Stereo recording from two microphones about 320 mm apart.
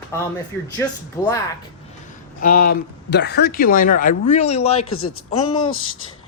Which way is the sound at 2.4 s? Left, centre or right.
Left.